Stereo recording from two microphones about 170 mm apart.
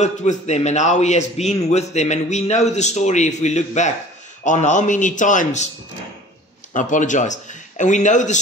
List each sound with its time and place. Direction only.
0.0 s a man's voice: 45° left (ahead or behind)
6.7 s a man's voice: 50° left (ahead or behind)